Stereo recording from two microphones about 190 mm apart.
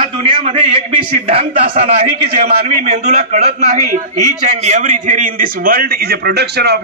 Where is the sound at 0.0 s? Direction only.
30° right (ahead or behind).